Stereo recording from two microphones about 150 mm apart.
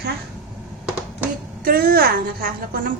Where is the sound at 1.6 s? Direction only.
85° right.